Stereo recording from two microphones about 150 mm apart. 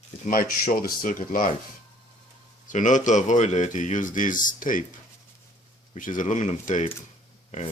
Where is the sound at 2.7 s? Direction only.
55° left (ahead or behind).